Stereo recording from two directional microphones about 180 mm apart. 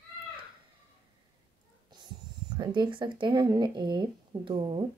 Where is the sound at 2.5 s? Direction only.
25° right (ahead or behind).